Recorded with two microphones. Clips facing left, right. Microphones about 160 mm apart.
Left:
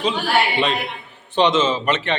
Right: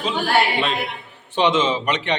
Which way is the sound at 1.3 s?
10° right (ahead or behind).